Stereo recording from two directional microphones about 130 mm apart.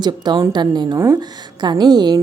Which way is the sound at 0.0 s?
35° right (ahead or behind).